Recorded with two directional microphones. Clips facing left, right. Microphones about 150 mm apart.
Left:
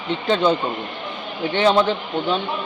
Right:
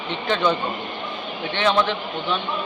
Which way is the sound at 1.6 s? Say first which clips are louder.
Left 4 dB; 35° left (ahead or behind).